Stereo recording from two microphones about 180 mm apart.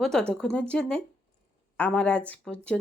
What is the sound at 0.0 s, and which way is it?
Speech, 5° left (ahead or behind).